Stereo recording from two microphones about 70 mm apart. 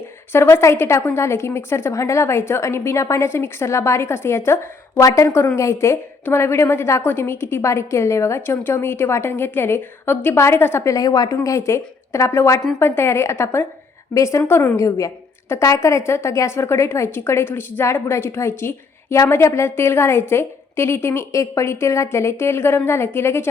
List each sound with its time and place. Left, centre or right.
0.3 s a woman's voice: left
8.4 s a woman's voice: left
10.8 s a woman's voice: left
14.1 s a woman's voice: left
14.4 s a woman's voice: left
14.8 s a woman's voice: left